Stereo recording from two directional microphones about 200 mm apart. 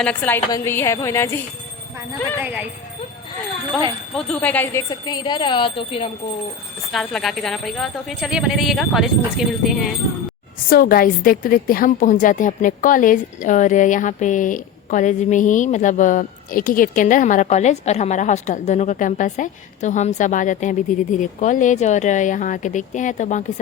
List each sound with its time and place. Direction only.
0.0 s a woman's voice: 5° left (ahead or behind)
2.4 s speech: 10° right (ahead or behind)
4.1 s speech: 5° left (ahead or behind); by 6.1 s 25° left (ahead or behind)
6.9 s speech: centre (ahead or behind)
10.7 s a woman's voice: 45° left (ahead or behind)